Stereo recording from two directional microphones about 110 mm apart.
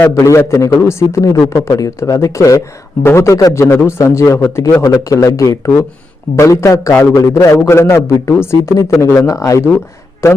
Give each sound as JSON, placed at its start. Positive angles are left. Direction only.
{"t": 0.0, "sound": "a man's voice", "side_deg": 25}